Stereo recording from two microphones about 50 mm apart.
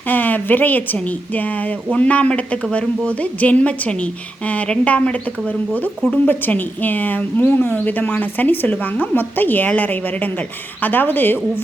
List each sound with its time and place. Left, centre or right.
0.1 s a woman's voice: left
1.9 s a woman's voice: left
6.2 s speech: left
7.5 s speech: left